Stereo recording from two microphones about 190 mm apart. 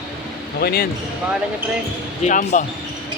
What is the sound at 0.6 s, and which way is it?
Speech, 50° left (ahead or behind).